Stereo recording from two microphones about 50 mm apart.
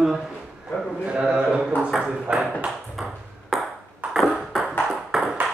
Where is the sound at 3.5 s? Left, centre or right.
Centre.